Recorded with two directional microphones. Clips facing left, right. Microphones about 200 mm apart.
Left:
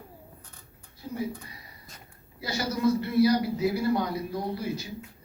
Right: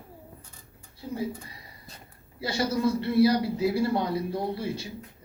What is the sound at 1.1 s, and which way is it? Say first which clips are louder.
Speech: right 1 dB; 30° right (ahead or behind).